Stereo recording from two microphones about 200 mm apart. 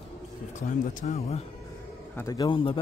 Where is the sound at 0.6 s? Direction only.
35° left (ahead or behind).